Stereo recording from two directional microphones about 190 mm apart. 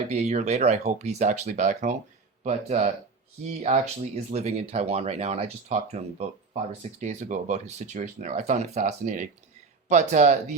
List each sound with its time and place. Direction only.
0.1 s speech: 35° right (ahead or behind)